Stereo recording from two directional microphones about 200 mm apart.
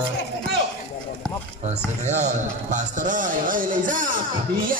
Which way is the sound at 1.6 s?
35° right (ahead or behind).